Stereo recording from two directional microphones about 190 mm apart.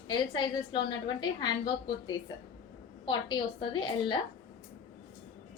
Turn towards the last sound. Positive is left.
turn(degrees=25)  # may be behind; listen again after turning